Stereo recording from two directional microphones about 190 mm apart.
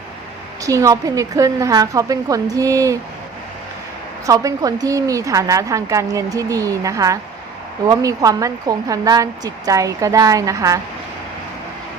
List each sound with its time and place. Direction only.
0.6 s a woman's voice: 15° right (ahead or behind)
4.3 s a woman's voice: 20° right (ahead or behind)